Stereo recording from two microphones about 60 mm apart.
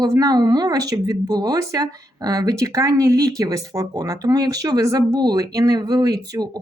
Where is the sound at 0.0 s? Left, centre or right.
Right.